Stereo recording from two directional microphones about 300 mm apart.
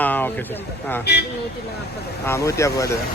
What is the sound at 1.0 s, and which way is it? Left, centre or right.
Speech, left.